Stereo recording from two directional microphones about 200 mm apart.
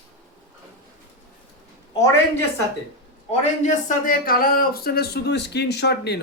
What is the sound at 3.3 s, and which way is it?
Speech, 40° left (ahead or behind).